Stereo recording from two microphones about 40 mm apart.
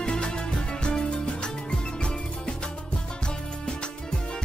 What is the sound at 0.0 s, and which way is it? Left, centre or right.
Music, left.